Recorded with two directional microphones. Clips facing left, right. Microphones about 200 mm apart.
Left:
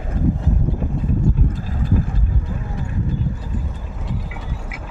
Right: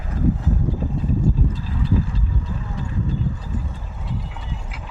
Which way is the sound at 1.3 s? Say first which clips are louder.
Left 1 dB; 60° left (ahead or behind).